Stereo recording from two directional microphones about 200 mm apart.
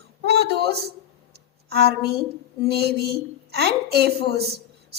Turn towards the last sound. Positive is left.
turn(degrees=-55)  # may be behind; listen again after turning